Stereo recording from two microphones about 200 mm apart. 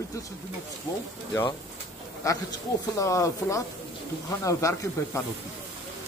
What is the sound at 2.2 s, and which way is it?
Speech, 15° left (ahead or behind).